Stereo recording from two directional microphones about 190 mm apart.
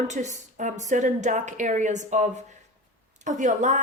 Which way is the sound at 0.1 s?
40° right (ahead or behind).